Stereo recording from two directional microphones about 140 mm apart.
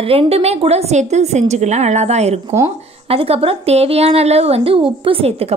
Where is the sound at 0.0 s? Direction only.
45° right (ahead or behind).